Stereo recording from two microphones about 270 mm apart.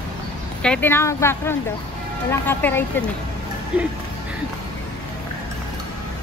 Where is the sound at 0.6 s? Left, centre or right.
Centre.